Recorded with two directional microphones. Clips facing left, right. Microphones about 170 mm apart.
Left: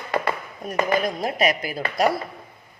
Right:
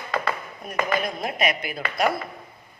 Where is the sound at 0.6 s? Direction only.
40° left (ahead or behind).